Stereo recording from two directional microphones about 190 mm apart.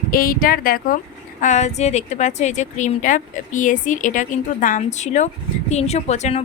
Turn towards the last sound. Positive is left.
turn(degrees=35)  # may be behind; listen again after turning